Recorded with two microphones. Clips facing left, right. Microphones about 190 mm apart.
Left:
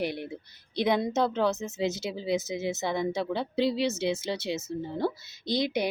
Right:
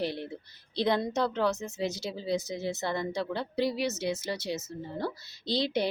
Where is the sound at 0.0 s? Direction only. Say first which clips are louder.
Left 1 dB; 15° left (ahead or behind).